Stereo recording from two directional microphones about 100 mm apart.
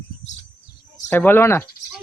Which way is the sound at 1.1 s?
20° left (ahead or behind).